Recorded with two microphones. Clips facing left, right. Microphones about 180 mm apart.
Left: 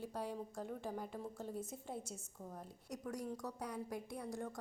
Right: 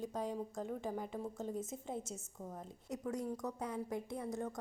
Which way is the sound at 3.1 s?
20° right (ahead or behind).